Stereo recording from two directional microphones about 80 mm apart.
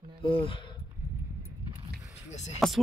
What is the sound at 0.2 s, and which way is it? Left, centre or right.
Speech, left.